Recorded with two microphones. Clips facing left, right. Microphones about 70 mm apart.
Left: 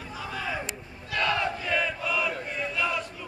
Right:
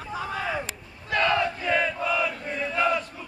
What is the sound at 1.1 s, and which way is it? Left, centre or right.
Battle cry, right.